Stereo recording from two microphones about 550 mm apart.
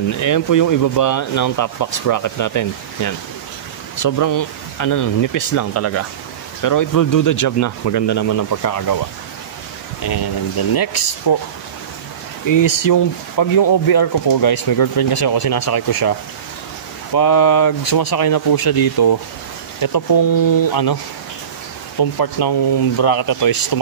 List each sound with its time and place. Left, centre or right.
0.2 s speech: left
10.7 s speech: left
12.4 s speech: left
22.2 s speech: left